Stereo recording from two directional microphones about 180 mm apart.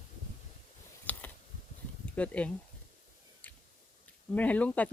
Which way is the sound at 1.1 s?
10° left (ahead or behind).